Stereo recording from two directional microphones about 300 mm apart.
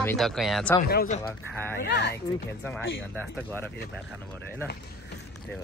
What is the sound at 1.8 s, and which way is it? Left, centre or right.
Speech, left.